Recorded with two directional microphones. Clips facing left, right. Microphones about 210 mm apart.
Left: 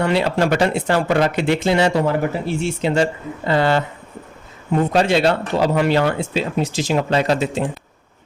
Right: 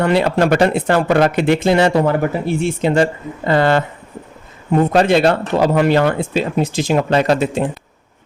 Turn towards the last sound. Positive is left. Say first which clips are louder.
# right 3 dB
turn(degrees=-55)  # may be behind; listen again after turning